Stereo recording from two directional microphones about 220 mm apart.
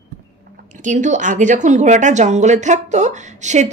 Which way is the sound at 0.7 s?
35° right (ahead or behind).